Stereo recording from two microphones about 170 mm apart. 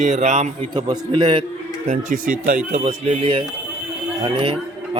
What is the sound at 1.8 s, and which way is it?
A man's voice, 45° right (ahead or behind).